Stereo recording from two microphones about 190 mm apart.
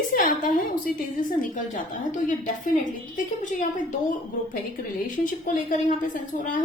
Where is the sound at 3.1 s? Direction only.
40° left (ahead or behind).